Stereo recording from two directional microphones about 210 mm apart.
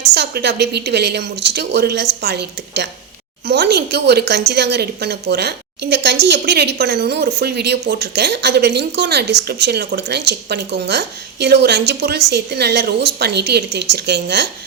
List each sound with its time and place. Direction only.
0.1 s a woman's voice: 50° right (ahead or behind)